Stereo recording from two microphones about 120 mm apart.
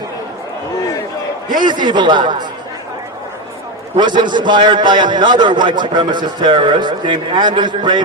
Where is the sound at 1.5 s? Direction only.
40° right (ahead or behind).